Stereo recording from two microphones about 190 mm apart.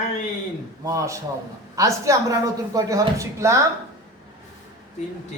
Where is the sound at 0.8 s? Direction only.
15° right (ahead or behind).